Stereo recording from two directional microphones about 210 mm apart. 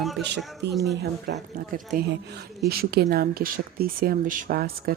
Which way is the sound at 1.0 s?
45° right (ahead or behind).